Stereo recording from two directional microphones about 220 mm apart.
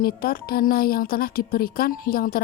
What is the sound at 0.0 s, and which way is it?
A woman's voice, 40° left (ahead or behind).